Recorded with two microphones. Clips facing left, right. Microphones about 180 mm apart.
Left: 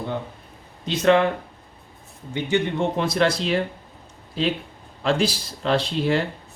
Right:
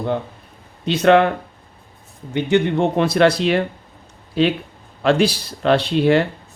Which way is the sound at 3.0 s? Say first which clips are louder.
Right 7 dB; 65° right (ahead or behind).